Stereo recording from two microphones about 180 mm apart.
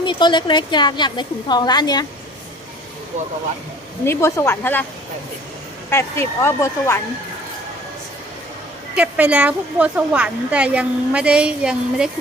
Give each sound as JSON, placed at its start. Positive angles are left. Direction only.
{"t": 0.0, "sound": "a woman's voice", "side_deg": 25}
{"t": 4.0, "sound": "speech", "side_deg": 15}
{"t": 5.9, "sound": "speech", "side_deg": 15}
{"t": 9.0, "sound": "a woman's voice", "side_deg": -5}